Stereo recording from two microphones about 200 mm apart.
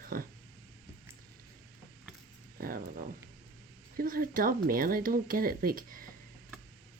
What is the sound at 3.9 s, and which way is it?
A woman's voice, 45° right (ahead or behind).